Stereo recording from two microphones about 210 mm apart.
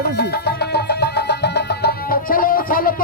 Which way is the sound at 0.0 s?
50° left (ahead or behind).